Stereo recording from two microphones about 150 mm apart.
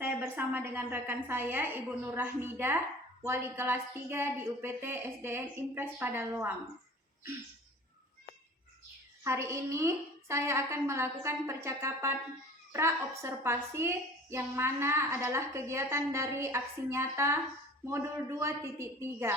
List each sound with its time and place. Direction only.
0.0 s a woman's voice: 15° right (ahead or behind)
9.2 s a woman's voice: 20° right (ahead or behind)